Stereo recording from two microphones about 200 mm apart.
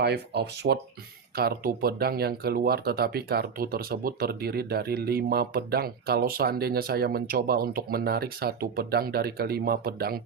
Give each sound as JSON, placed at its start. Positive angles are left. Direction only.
{"t": 0.0, "sound": "speech", "side_deg": -55}